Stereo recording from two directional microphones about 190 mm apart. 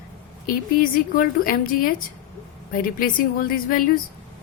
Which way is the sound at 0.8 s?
45° left (ahead or behind).